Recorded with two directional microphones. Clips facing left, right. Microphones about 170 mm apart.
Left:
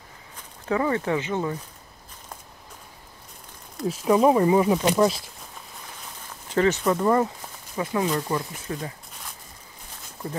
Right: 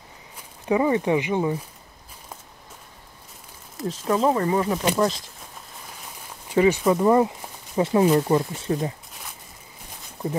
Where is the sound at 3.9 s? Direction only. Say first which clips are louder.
Left 3 dB; 10° left (ahead or behind).